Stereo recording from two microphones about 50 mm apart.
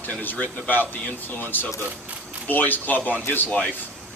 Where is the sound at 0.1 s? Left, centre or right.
Left.